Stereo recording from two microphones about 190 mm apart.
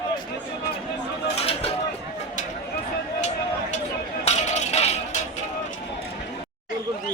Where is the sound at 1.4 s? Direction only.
30° left (ahead or behind).